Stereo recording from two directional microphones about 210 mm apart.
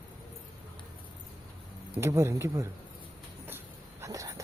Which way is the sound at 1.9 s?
15° right (ahead or behind).